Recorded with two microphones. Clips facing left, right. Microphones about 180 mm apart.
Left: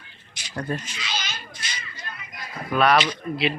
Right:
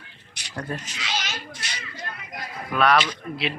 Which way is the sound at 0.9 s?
75° right (ahead or behind).